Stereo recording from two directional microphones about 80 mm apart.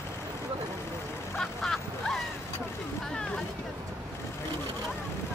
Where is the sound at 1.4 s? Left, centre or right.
Centre.